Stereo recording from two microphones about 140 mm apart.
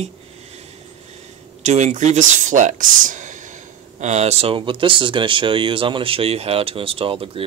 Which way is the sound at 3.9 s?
55° right (ahead or behind).